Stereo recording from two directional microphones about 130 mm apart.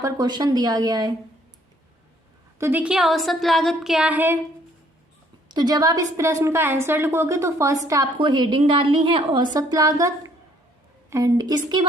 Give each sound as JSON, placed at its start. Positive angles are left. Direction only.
{"t": 0.0, "sound": "a woman's voice", "side_deg": -30}
{"t": 2.6, "sound": "a woman's voice", "side_deg": -15}
{"t": 5.5, "sound": "a woman's voice", "side_deg": -30}
{"t": 8.2, "sound": "a woman's voice", "side_deg": -35}